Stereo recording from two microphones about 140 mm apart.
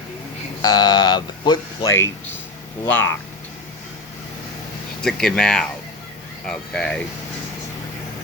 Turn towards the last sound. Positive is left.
turn(degrees=5)  # may be behind; listen again after turning